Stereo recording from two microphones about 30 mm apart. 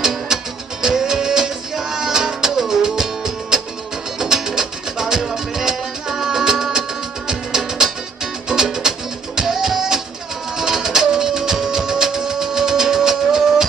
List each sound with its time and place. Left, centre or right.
0.3 s music: centre